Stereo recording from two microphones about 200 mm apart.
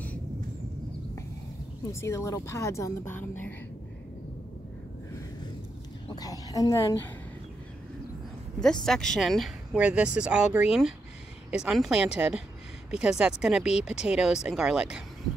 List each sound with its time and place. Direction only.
1.9 s speech: 15° left (ahead or behind)
6.0 s speech: 20° left (ahead or behind)
8.8 s speech: 5° left (ahead or behind)